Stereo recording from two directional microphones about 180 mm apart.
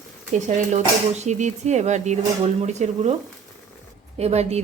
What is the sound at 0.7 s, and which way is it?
Speech, 40° right (ahead or behind).